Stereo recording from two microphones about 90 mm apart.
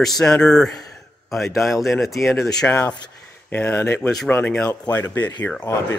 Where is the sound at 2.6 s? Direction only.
15° left (ahead or behind).